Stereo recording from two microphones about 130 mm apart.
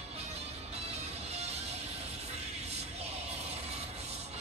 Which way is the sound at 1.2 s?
55° right (ahead or behind).